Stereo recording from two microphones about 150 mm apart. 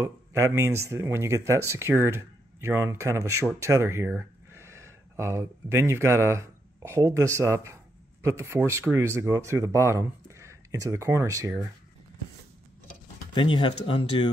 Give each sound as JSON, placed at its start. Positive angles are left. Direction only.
{"t": 0.0, "sound": "speech", "side_deg": -20}
{"t": 13.3, "sound": "speech", "side_deg": 30}